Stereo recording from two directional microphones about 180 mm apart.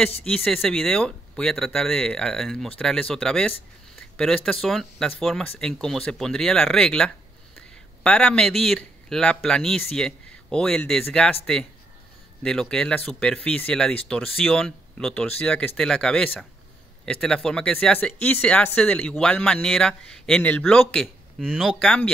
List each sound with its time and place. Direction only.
0.2 s speech: 5° left (ahead or behind)
12.4 s speech: 5° left (ahead or behind)